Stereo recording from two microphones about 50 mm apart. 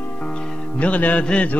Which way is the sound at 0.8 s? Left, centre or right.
Left.